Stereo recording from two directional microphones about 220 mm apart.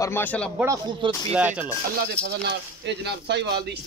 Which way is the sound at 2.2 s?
50° right (ahead or behind).